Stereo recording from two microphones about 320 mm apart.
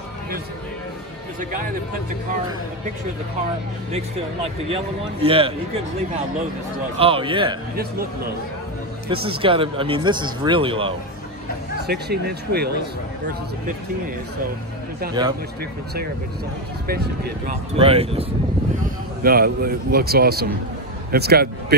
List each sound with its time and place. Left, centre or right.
5.2 s speech: centre
7.0 s speech: centre
9.1 s speech: centre
11.9 s a man's voice: right
15.2 s speech: centre
16.8 s a man's voice: right
17.7 s speech: centre
19.2 s a man's voice: right